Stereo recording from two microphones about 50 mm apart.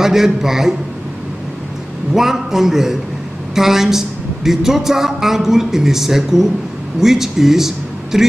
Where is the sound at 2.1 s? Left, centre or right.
Centre.